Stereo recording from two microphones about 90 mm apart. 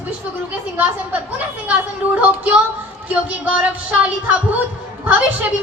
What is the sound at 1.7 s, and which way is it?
A woman's voice, 15° right (ahead or behind).